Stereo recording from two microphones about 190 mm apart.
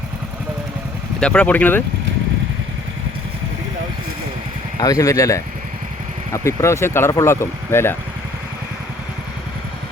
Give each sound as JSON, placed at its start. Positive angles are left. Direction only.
{"t": 1.2, "sound": "speech", "side_deg": 5}
{"t": 4.8, "sound": "speech", "side_deg": 20}